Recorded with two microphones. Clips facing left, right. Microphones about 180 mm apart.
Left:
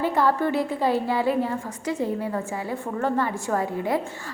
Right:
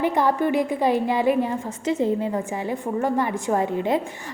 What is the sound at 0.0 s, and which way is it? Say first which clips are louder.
A woman's voice: right 1 dB; 15° right (ahead or behind).